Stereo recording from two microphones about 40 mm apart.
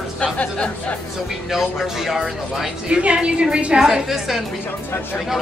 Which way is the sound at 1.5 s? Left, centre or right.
Centre.